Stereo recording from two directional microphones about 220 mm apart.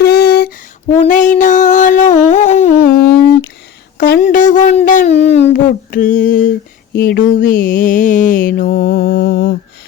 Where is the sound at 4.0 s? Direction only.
40° left (ahead or behind).